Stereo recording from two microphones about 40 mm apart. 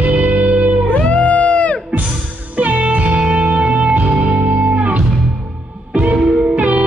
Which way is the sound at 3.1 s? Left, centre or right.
Right.